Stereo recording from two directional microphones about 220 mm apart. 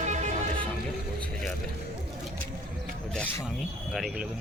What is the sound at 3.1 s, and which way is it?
Speech, 5° left (ahead or behind).